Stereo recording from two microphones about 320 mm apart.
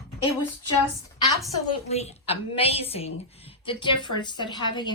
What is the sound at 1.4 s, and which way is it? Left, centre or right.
A woman's voice, centre.